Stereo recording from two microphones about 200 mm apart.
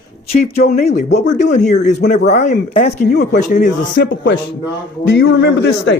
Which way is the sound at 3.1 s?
60° left (ahead or behind).